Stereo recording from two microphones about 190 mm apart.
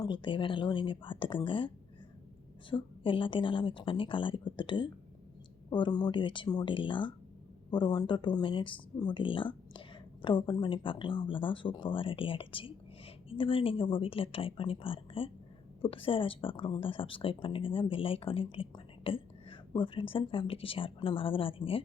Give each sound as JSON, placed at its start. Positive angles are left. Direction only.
{"t": 0.0, "sound": "speech", "side_deg": 25}